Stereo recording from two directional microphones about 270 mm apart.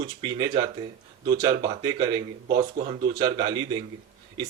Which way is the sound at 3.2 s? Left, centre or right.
Centre.